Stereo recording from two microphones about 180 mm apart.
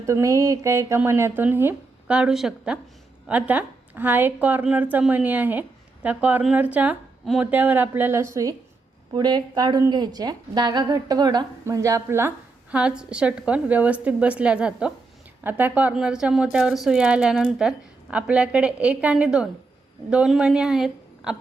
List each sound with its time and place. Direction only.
0.0 s a woman's voice: 15° right (ahead or behind)